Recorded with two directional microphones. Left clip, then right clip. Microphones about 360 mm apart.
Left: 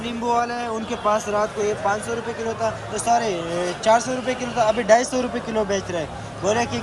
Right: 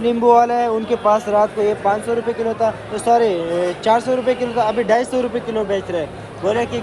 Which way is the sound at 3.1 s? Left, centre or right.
Centre.